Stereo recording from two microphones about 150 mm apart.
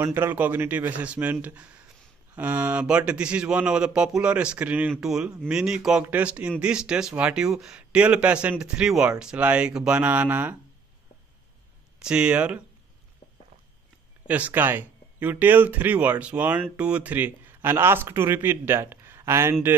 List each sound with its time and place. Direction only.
0.0 s speech: 15° right (ahead or behind)
12.0 s speech: 5° right (ahead or behind)
14.2 s speech: 10° right (ahead or behind)